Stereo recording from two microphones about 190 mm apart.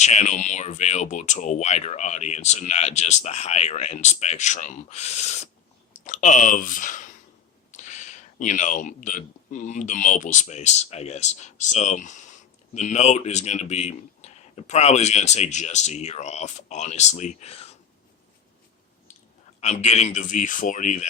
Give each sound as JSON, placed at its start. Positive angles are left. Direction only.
{"t": 0.0, "sound": "speech", "side_deg": 35}
{"t": 19.5, "sound": "speech", "side_deg": 35}